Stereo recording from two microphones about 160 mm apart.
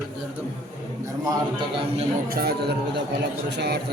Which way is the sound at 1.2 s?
25° right (ahead or behind).